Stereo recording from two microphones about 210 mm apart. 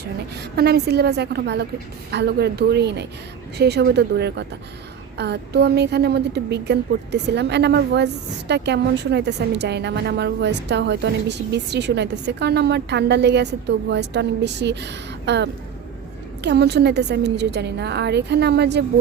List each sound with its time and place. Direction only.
0.5 s a woman's voice: 50° right (ahead or behind)